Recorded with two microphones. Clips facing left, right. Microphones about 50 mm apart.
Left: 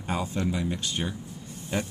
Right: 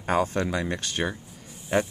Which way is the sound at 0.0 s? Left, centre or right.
Right.